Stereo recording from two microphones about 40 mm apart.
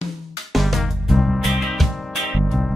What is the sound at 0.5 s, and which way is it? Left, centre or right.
Music, centre.